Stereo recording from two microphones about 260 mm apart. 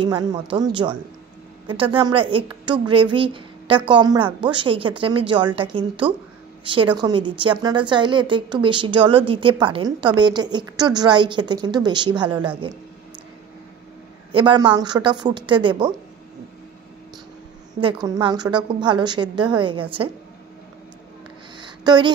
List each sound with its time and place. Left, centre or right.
0.0 s a woman's voice: centre
14.3 s a woman's voice: centre
17.7 s a woman's voice: centre
21.5 s a sound: centre